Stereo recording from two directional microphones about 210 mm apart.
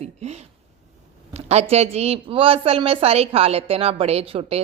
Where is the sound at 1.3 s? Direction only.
30° right (ahead or behind).